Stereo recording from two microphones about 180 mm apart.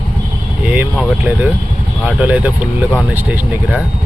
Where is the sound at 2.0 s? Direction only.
10° right (ahead or behind).